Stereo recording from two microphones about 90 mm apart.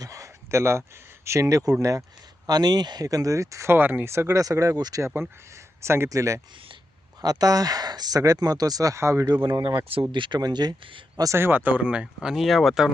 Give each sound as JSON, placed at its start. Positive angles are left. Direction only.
{"t": 0.0, "sound": "a sound", "side_deg": -40}
{"t": 1.8, "sound": "speech", "side_deg": -35}
{"t": 2.5, "sound": "speech", "side_deg": -50}
{"t": 5.0, "sound": "speech", "side_deg": -25}
{"t": 9.3, "sound": "speech", "side_deg": -55}
{"t": 10.1, "sound": "speech", "side_deg": -65}
{"t": 11.3, "sound": "speech", "side_deg": -25}